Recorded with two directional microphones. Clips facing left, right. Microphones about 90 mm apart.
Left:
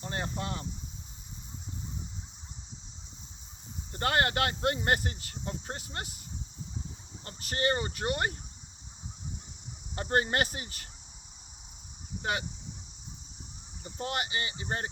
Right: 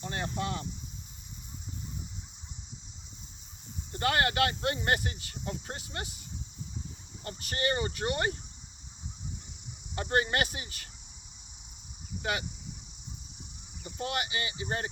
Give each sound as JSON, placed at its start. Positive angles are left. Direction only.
{"t": 0.0, "sound": "speech", "side_deg": 30}
{"t": 3.9, "sound": "speech", "side_deg": 35}
{"t": 7.3, "sound": "speech", "side_deg": 35}
{"t": 9.9, "sound": "speech", "side_deg": 35}
{"t": 12.2, "sound": "speech", "side_deg": 35}
{"t": 13.8, "sound": "speech", "side_deg": 35}